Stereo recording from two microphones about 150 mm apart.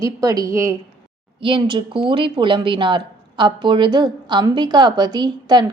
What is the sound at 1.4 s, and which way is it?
Speech, 35° right (ahead or behind).